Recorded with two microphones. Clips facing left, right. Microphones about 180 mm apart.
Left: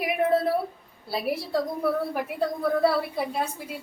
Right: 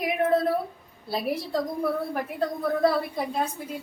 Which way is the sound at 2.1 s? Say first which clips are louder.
Left 1 dB; 10° left (ahead or behind).